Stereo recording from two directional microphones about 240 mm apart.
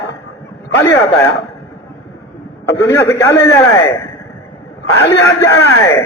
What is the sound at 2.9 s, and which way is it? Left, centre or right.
A man's voice, centre.